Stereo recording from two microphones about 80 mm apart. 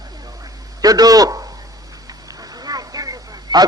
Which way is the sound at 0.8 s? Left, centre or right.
Right.